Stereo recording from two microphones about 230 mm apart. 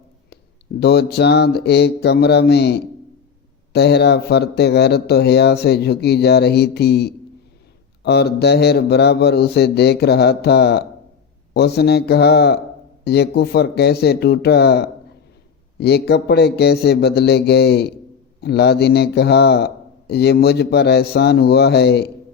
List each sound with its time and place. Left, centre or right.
0.8 s a man's voice: left